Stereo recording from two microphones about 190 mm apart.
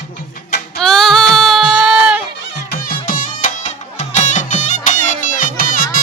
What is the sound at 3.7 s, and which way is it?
Music, 40° left (ahead or behind).